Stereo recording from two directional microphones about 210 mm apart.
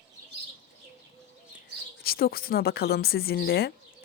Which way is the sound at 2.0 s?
45° left (ahead or behind).